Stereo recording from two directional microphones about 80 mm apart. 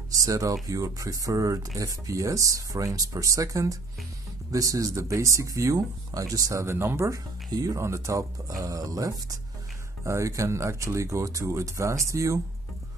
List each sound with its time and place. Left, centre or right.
0.2 s speech: right
7.5 s speech: right